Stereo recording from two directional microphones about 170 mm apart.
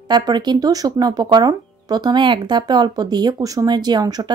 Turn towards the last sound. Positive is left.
turn(degrees=-25)  # may be behind; listen again after turning